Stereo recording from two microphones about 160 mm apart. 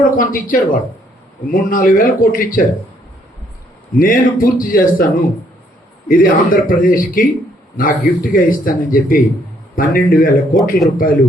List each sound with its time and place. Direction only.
0.0 s speech: 60° left (ahead or behind)
3.9 s speech: 60° left (ahead or behind)